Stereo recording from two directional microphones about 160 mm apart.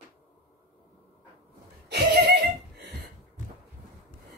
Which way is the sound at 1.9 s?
90° right.